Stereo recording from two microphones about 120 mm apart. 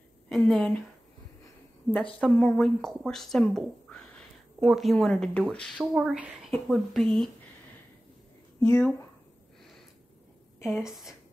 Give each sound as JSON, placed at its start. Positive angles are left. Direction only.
{"t": 0.3, "sound": "speech", "side_deg": 5}
{"t": 2.1, "sound": "a woman's voice", "side_deg": 10}
{"t": 5.8, "sound": "speech", "side_deg": -5}
{"t": 8.5, "sound": "speech", "side_deg": 20}
{"t": 10.6, "sound": "speech", "side_deg": -5}